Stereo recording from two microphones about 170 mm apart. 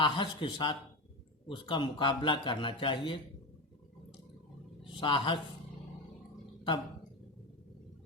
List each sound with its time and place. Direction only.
0.0 s a man's voice: 30° left (ahead or behind)
4.8 s a man's voice: 30° left (ahead or behind)